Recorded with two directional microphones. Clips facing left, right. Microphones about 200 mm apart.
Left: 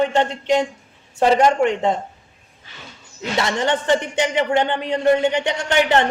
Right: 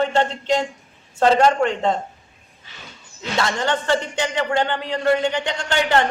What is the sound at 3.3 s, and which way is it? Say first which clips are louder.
Speech: left 2 dB; 20° left (ahead or behind).